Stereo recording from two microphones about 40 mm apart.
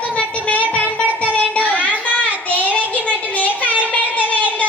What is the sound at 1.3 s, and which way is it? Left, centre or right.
Child singing, left.